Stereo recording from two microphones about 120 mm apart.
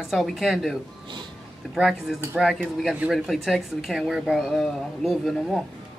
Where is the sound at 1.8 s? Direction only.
Centre (ahead or behind).